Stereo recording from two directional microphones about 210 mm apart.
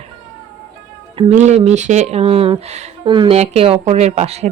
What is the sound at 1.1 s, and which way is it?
Speech, 30° right (ahead or behind).